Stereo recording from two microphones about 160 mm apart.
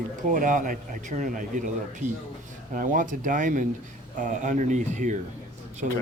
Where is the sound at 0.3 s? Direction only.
55° right (ahead or behind).